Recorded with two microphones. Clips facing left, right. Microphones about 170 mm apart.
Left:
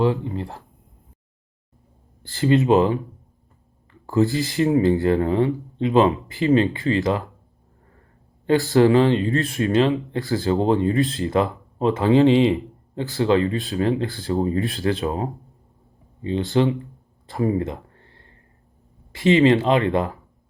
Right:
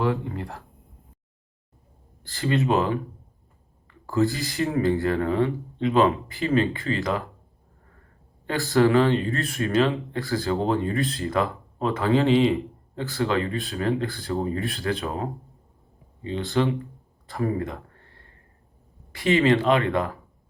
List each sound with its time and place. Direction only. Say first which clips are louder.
0.0 s speech: left 4 dB; 25° left (ahead or behind)
2.3 s speech: left 6 dB; 25° left (ahead or behind)
4.0 s speech: left 4 dB; 25° left (ahead or behind)
8.8 s speech: left 1 dB; 30° left (ahead or behind)
9.9 s speech: left 4 dB; 20° left (ahead or behind)
16.5 s speech: left 3 dB; 20° left (ahead or behind)
17.3 s a sound: left 4 dB; 25° left (ahead or behind)
19.1 s speech: left 4 dB; 20° left (ahead or behind)